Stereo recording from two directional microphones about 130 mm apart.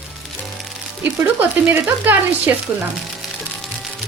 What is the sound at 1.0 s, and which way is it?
Speech, 15° right (ahead or behind).